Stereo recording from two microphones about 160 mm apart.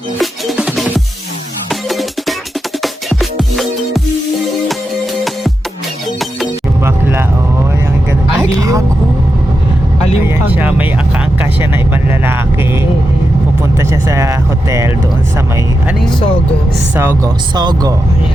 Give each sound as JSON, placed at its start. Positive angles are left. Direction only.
{"t": 0.2, "sound": "music", "side_deg": -5}
{"t": 6.8, "sound": "vehicle", "side_deg": -15}
{"t": 8.4, "sound": "vehicle", "side_deg": -20}
{"t": 10.2, "sound": "music", "side_deg": -10}
{"t": 11.3, "sound": "vehicle", "side_deg": -15}
{"t": 15.9, "sound": "vehicle", "side_deg": 0}
{"t": 16.9, "sound": "speech", "side_deg": -15}
{"t": 17.5, "sound": "speech", "side_deg": -25}